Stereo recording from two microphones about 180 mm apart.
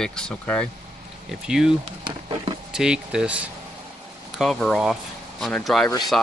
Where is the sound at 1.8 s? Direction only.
25° right (ahead or behind).